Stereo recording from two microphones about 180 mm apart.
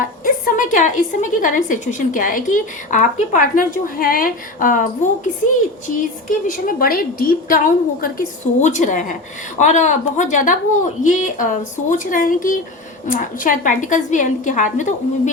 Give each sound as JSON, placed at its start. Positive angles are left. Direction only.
{"t": 0.0, "sound": "a woman's voice", "side_deg": 50}
{"t": 6.5, "sound": "a woman's voice", "side_deg": 50}